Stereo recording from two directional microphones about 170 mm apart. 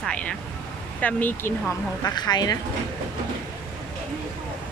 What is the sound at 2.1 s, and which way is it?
Speech, 25° left (ahead or behind).